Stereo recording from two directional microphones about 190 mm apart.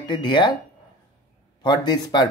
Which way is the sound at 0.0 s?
25° left (ahead or behind).